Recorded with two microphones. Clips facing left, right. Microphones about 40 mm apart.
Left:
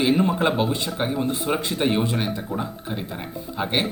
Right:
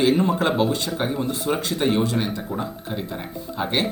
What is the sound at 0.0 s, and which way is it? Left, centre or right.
Speech, centre.